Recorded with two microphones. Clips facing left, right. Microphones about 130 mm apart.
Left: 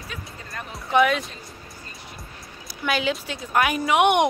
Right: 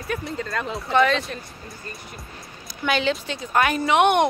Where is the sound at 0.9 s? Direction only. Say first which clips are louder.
Even; 10° left (ahead or behind).